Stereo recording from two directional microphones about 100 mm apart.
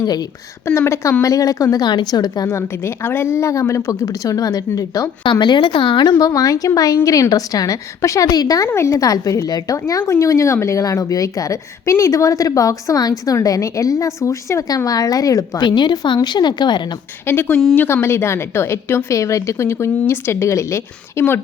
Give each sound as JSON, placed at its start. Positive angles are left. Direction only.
{"t": 0.0, "sound": "a woman's voice", "side_deg": 40}
{"t": 0.6, "sound": "a woman's voice", "side_deg": 25}
{"t": 2.5, "sound": "a woman's voice", "side_deg": 25}
{"t": 5.2, "sound": "a woman's voice", "side_deg": 50}
{"t": 6.1, "sound": "a woman's voice", "side_deg": 35}
{"t": 15.6, "sound": "a woman's voice", "side_deg": 45}
{"t": 17.2, "sound": "a woman's voice", "side_deg": 20}